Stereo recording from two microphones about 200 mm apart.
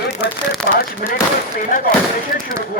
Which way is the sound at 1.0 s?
45° left (ahead or behind).